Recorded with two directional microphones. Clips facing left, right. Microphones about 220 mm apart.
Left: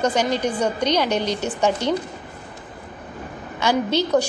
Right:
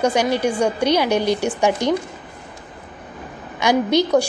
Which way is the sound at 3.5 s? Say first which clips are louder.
Right 4 dB; 15° right (ahead or behind).